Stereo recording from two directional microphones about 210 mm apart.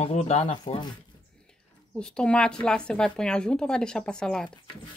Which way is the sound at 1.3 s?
5° left (ahead or behind).